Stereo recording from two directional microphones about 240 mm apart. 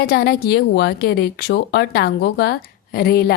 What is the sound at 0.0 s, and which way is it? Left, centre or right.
A woman's voice, left.